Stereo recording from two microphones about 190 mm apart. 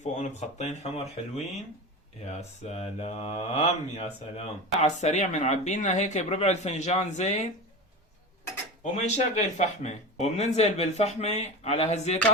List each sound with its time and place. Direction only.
0.0 s speech: 40° left (ahead or behind)
2.4 s speech: 35° left (ahead or behind)
8.8 s speech: 35° left (ahead or behind)